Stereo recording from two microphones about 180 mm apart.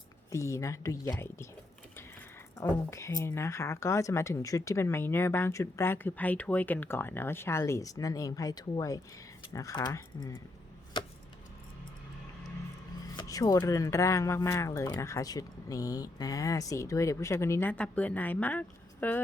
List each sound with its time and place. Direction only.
0.3 s speech: 15° left (ahead or behind)
2.6 s speech: 15° left (ahead or behind)
11.0 s keys jangling: 25° left (ahead or behind)
13.1 s speech: 20° left (ahead or behind)